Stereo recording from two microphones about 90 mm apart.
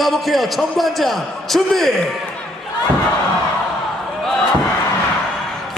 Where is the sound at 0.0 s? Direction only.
Centre (ahead or behind).